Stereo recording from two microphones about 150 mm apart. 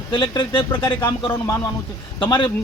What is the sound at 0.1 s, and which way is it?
Speech, 30° left (ahead or behind).